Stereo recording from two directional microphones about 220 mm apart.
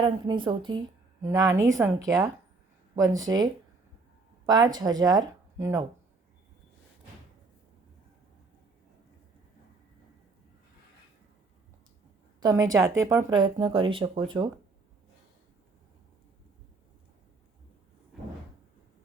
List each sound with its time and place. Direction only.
0.0 s speech: 20° right (ahead or behind)
12.4 s speech: 15° right (ahead or behind)
18.1 s door: centre (ahead or behind)